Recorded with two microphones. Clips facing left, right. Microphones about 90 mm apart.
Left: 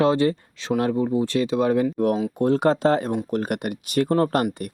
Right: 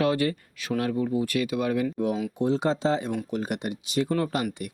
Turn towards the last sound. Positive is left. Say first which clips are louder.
# left 6 dB
turn(degrees=45)  # may be behind; listen again after turning